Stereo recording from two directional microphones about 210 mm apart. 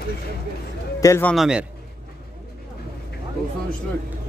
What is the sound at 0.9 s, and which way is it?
Speech, 15° left (ahead or behind).